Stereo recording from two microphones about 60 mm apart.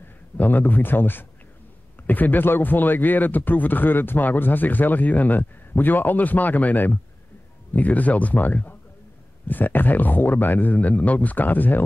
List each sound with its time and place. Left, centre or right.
0.4 s speech: left